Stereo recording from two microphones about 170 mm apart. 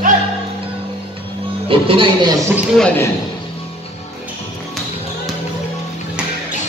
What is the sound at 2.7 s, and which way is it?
Speech, 5° left (ahead or behind).